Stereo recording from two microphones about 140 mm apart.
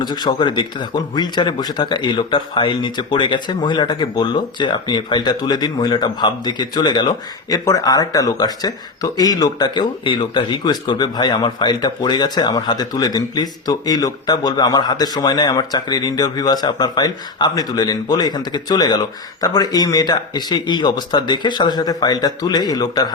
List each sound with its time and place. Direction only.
0.0 s speech: 30° left (ahead or behind)